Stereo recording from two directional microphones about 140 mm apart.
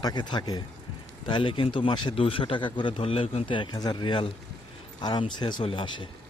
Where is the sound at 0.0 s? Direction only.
30° left (ahead or behind).